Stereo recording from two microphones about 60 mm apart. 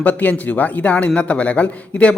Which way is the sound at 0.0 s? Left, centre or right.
Left.